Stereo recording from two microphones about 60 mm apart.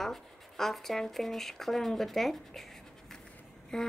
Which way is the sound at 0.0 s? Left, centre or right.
Centre.